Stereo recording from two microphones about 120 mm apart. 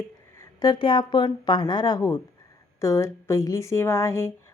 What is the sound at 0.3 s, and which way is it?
Speech, 35° left (ahead or behind).